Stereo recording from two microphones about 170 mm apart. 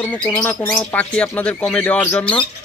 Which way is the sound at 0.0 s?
10° left (ahead or behind).